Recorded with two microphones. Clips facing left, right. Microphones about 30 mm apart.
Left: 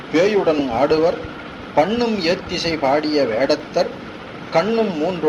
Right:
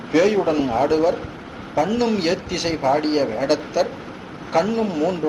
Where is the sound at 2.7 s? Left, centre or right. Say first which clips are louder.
Left 2 dB; left.